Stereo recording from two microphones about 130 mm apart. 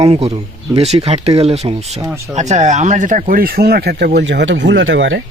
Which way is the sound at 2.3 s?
65° right (ahead or behind).